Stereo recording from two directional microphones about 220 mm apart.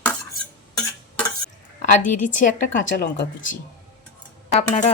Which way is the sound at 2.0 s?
35° left (ahead or behind).